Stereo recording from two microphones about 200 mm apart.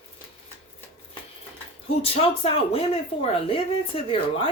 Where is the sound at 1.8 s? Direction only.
30° left (ahead or behind).